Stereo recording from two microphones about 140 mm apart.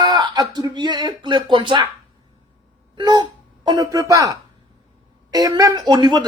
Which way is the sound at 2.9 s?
30° right (ahead or behind).